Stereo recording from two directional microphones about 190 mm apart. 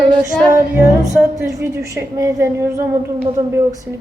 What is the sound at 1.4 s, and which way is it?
A woman's voice, 15° right (ahead or behind).